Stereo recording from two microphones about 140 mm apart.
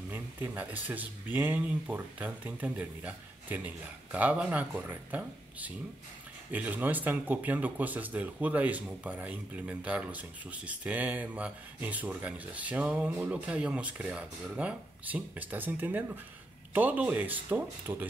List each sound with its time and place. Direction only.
0.1 s speech: 10° right (ahead or behind)